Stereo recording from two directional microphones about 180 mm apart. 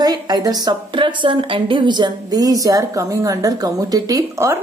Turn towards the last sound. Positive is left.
turn(degrees=-15)  # may be behind; listen again after turning